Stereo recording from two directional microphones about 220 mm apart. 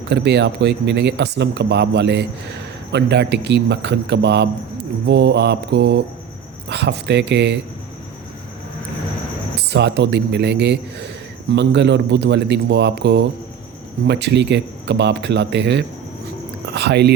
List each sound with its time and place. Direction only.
0.1 s speech: 50° right (ahead or behind)
9.6 s a man's voice: 50° right (ahead or behind)